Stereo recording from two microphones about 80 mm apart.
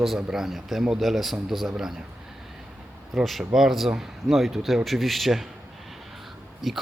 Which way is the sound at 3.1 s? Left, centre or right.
Centre.